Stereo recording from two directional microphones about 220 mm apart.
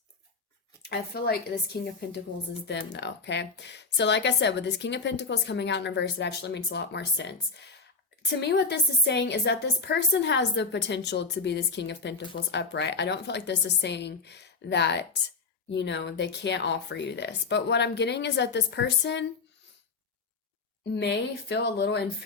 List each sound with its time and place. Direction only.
0.8 s speech: 45° left (ahead or behind)
20.9 s speech: 50° left (ahead or behind)